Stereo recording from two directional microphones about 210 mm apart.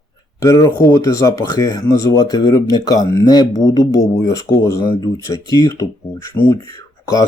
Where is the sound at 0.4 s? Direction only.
15° left (ahead or behind).